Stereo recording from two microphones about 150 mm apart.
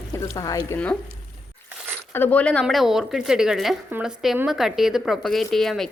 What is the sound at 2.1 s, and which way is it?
Speech, 10° left (ahead or behind).